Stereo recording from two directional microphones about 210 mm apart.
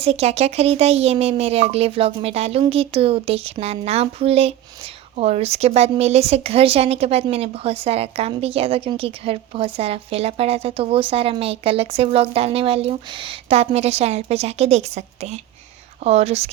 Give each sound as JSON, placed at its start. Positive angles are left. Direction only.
{"t": 0.0, "sound": "speech", "side_deg": -30}